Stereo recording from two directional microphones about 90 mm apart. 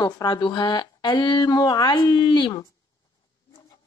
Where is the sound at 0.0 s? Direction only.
45° left (ahead or behind).